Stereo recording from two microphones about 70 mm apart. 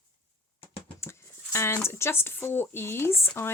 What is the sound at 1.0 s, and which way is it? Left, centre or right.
Speech, left.